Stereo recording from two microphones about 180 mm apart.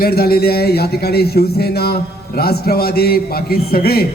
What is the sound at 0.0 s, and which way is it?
A man's voice, 60° left (ahead or behind).